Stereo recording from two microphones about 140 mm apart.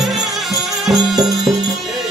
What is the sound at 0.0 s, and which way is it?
Music, centre (ahead or behind).